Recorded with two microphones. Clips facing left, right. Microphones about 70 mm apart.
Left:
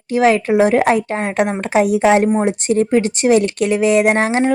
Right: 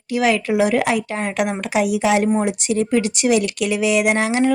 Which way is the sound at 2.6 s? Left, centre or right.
Left.